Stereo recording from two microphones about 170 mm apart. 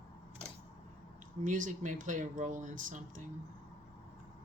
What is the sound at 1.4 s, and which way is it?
Speech, 50° right (ahead or behind).